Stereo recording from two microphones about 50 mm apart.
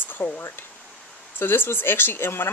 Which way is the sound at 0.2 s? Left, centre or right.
Left.